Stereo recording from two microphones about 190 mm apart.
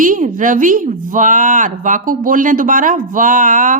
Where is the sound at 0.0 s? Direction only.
45° right (ahead or behind).